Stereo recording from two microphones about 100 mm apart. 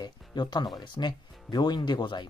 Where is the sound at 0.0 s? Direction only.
45° left (ahead or behind).